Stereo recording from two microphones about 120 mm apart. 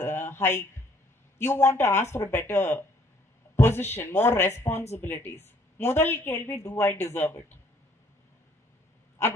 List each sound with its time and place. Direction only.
0.0 s a sound: 20° left (ahead or behind)
1.4 s a woman's voice: 20° left (ahead or behind)
9.2 s a woman's voice: 20° left (ahead or behind)